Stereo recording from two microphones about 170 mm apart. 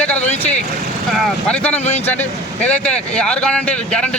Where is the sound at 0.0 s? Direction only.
10° left (ahead or behind).